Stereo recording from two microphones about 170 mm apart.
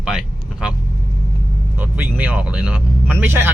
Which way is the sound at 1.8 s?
10° right (ahead or behind).